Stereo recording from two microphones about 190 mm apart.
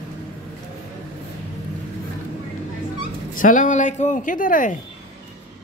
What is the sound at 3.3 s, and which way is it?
Speech, 45° left (ahead or behind).